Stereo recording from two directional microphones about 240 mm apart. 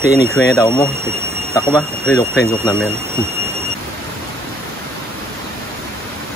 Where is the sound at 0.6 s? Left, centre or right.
Centre.